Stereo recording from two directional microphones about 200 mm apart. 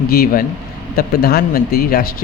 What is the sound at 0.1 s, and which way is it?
Speech, 50° left (ahead or behind).